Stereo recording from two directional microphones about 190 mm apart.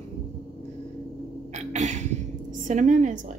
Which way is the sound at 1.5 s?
40° right (ahead or behind).